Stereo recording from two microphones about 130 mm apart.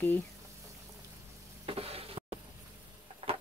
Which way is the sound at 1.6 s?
50° right (ahead or behind).